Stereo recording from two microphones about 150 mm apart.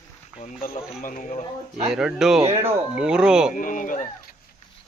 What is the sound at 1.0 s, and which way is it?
Speech, 60° left (ahead or behind).